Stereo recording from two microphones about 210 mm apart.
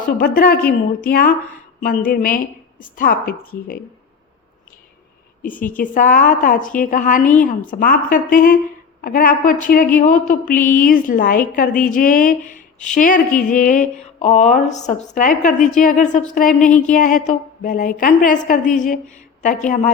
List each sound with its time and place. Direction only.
0.0 s a woman's voice: 45° left (ahead or behind)
5.7 s a woman's voice: 40° left (ahead or behind)